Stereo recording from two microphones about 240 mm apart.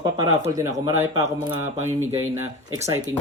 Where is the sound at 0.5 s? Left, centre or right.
Centre.